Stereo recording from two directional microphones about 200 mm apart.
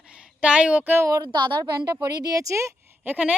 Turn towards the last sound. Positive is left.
turn(degrees=-10)  # may be behind; listen again after turning